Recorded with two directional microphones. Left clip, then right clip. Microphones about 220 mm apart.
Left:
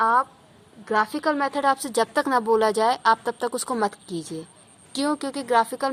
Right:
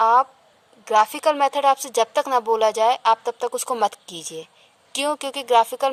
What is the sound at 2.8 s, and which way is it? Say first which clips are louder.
Speech: right 2 dB; 20° right (ahead or behind).